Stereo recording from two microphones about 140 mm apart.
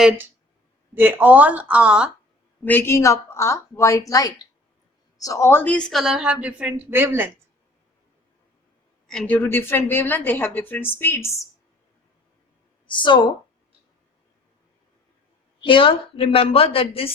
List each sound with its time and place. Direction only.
0.9 s speech: 15° right (ahead or behind)
2.6 s a woman's voice: 15° left (ahead or behind); by 7.3 s 15° right (ahead or behind)
9.0 s a woman's voice: 5° left (ahead or behind)
12.9 s a woman's voice: 35° left (ahead or behind)
15.6 s a woman's voice: 40° left (ahead or behind)